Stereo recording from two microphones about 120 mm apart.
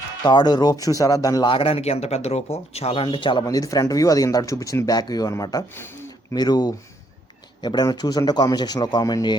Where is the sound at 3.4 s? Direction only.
30° left (ahead or behind).